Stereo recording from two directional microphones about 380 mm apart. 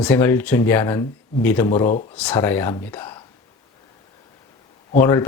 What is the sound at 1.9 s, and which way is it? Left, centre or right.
Speech, centre.